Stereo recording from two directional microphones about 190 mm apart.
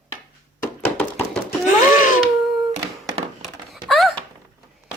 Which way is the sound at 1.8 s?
45° left (ahead or behind).